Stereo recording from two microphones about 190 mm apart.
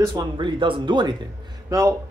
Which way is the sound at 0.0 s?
20° right (ahead or behind).